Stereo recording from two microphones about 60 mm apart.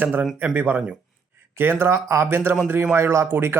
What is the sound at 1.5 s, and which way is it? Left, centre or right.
Speech, right.